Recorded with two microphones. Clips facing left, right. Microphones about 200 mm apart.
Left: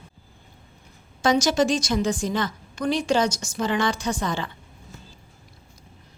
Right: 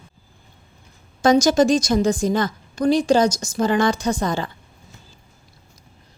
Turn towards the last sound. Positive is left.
turn(degrees=-40)  # may be behind; listen again after turning